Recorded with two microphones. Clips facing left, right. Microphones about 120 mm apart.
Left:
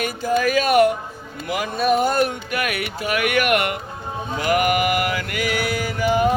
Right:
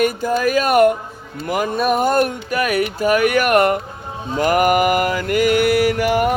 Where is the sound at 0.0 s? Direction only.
50° right (ahead or behind).